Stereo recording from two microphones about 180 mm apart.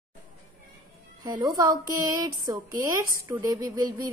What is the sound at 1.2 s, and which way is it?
A woman's voice, 25° right (ahead or behind).